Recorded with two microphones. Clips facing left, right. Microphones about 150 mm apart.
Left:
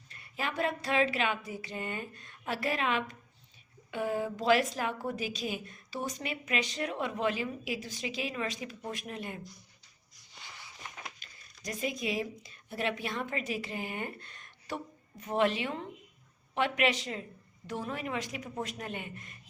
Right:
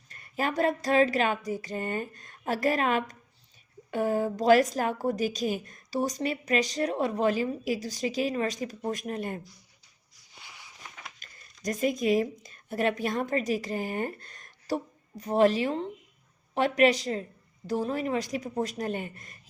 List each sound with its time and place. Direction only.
0.1 s a sound: 45° right (ahead or behind)
3.9 s a woman's voice: 40° right (ahead or behind)
11.2 s a woman's voice: 45° right (ahead or behind)